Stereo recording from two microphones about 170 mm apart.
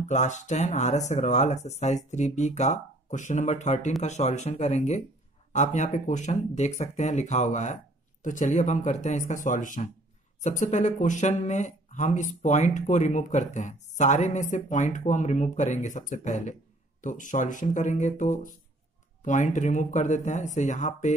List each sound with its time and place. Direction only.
0.1 s speech: 45° left (ahead or behind)